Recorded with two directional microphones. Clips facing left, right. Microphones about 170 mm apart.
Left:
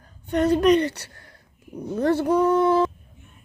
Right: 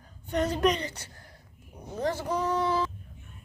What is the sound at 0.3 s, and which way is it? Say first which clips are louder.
A woman's voice: left 8 dB; 60° left (ahead or behind).